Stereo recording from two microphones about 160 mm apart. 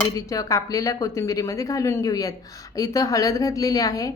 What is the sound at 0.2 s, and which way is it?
A woman's voice, 20° left (ahead or behind).